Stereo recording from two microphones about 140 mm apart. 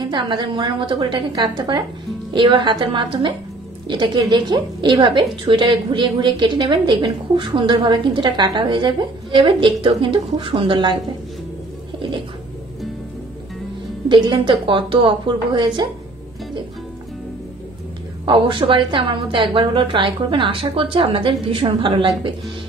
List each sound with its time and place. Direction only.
0.0 s a woman's voice: 35° right (ahead or behind)
14.0 s a woman's voice: 35° right (ahead or behind)
18.2 s a woman's voice: 35° right (ahead or behind)